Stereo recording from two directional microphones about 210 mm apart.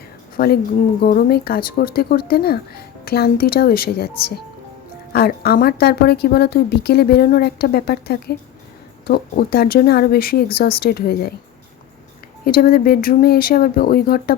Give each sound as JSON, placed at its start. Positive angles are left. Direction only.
{"t": 0.3, "sound": "a woman's voice", "side_deg": 45}
{"t": 12.5, "sound": "a woman's voice", "side_deg": 45}